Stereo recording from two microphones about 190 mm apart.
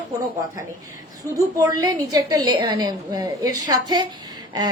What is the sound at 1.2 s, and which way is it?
A woman's voice, 20° right (ahead or behind).